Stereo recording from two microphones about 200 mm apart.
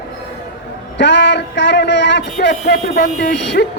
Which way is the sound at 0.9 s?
60° left (ahead or behind).